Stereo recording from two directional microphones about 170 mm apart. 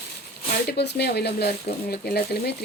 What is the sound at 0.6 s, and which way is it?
Speech, 80° left.